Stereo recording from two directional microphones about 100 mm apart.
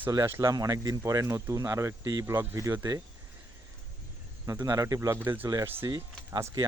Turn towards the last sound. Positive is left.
turn(degrees=-30)  # may be behind; listen again after turning